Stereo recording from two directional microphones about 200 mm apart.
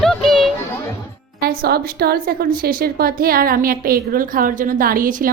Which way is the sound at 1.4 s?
50° right (ahead or behind).